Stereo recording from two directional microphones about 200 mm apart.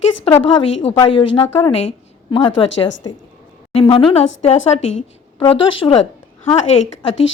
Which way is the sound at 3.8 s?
25° left (ahead or behind).